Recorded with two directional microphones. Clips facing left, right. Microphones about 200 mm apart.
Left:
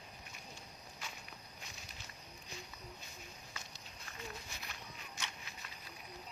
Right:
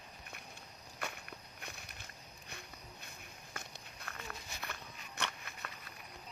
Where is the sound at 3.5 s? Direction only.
55° right (ahead or behind).